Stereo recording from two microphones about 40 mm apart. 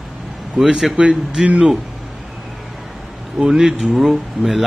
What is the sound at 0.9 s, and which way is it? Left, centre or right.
Speech, centre.